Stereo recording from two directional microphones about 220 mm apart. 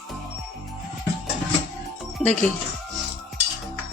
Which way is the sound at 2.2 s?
5° left (ahead or behind).